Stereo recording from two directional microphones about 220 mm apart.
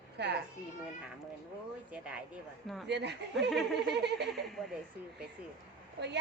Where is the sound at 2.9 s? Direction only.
50° right (ahead or behind).